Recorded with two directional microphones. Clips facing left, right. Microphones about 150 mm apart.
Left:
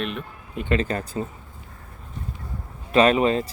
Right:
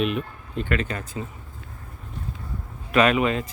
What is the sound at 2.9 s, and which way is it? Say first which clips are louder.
Speech: left 2 dB; 30° left (ahead or behind).